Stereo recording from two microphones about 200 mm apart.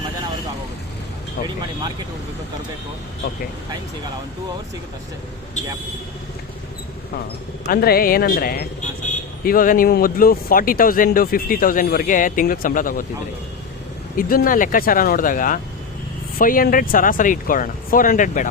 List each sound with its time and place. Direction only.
7.7 s speech: 50° left (ahead or behind)
14.2 s speech: 45° left (ahead or behind)